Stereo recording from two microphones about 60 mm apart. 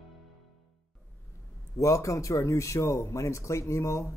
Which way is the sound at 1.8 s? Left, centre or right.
Left.